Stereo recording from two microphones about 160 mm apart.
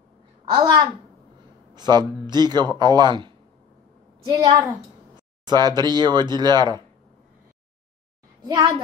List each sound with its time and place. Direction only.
0.6 s speech: 25° right (ahead or behind)
8.5 s speech: 30° right (ahead or behind)